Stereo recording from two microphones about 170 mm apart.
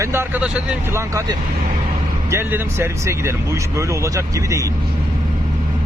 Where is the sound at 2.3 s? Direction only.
15° right (ahead or behind).